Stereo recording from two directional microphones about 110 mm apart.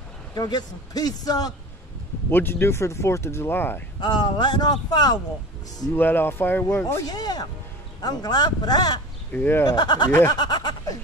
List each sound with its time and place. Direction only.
0.3 s a man's voice: 40° left (ahead or behind)
2.3 s speech: 20° left (ahead or behind)
4.0 s a man's voice: 45° left (ahead or behind)
5.9 s speech: 20° left (ahead or behind)
7.1 s a man's voice: 40° left (ahead or behind)
9.3 s speech: 15° left (ahead or behind)
9.7 s a man's voice: 40° left (ahead or behind)